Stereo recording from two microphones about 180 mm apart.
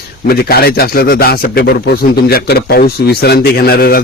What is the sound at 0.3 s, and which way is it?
A man's voice, 60° left (ahead or behind).